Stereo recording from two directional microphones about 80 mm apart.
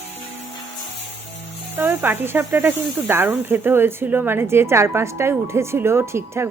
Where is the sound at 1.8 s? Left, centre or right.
Right.